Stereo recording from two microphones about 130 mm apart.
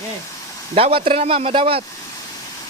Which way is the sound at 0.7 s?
45° right (ahead or behind).